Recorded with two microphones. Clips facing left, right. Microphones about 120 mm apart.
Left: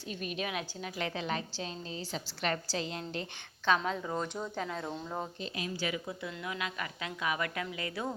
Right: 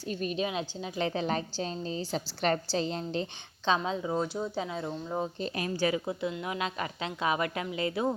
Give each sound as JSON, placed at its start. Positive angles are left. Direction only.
{"t": 0.1, "sound": "a woman's voice", "side_deg": -35}
{"t": 0.4, "sound": "a woman's voice", "side_deg": -25}
{"t": 3.8, "sound": "speech", "side_deg": -15}
{"t": 5.4, "sound": "speech", "side_deg": -50}
{"t": 5.8, "sound": "a woman's voice", "side_deg": -35}
{"t": 6.2, "sound": "a woman's voice", "side_deg": -25}